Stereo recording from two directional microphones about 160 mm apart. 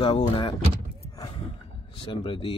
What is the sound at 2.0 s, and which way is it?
Speech, 35° left (ahead or behind).